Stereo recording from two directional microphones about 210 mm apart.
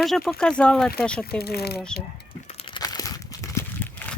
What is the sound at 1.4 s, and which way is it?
Speech, 50° left (ahead or behind).